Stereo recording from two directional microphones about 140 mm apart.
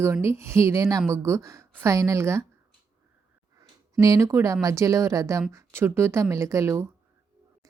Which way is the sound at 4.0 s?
25° right (ahead or behind).